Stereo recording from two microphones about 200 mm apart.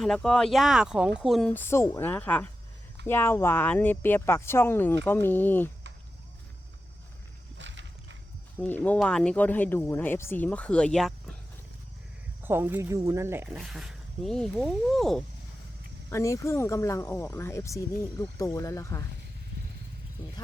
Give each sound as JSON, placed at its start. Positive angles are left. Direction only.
{"t": 0.0, "sound": "speech", "side_deg": 0}
{"t": 7.6, "sound": "a sound", "side_deg": -65}
{"t": 8.6, "sound": "speech", "side_deg": 10}
{"t": 12.4, "sound": "speech", "side_deg": -10}
{"t": 16.0, "sound": "speech", "side_deg": 15}